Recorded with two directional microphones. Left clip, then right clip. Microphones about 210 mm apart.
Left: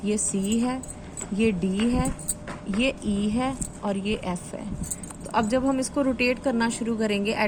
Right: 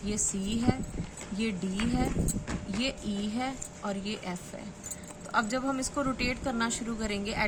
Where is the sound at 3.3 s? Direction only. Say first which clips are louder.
Left 6 dB; 10° left (ahead or behind).